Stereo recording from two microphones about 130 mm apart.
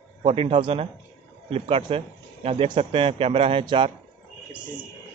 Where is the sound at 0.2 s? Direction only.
45° right (ahead or behind).